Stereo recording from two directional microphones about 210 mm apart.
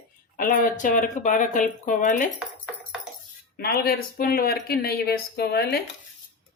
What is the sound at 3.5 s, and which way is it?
Speech, 45° left (ahead or behind).